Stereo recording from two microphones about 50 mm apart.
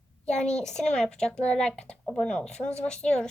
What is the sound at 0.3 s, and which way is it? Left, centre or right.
Speech, centre.